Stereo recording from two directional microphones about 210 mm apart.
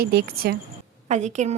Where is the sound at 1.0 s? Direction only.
35° right (ahead or behind).